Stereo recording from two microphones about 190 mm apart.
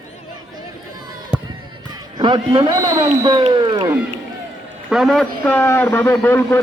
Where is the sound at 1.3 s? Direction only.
5° right (ahead or behind).